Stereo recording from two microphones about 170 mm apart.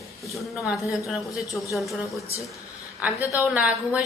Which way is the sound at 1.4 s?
20° left (ahead or behind).